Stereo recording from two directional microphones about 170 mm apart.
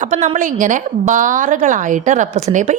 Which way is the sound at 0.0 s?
45° right (ahead or behind).